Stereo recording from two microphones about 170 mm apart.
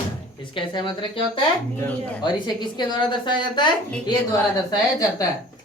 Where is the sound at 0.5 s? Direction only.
30° left (ahead or behind).